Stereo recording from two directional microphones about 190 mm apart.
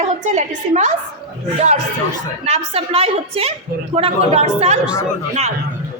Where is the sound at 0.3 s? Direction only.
40° right (ahead or behind).